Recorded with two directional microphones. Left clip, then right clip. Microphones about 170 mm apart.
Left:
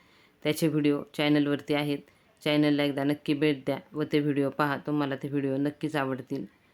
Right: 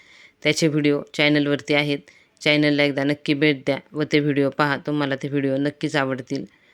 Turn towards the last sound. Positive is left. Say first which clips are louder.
# right 7 dB
turn(degrees=-25)  # may be behind; listen again after turning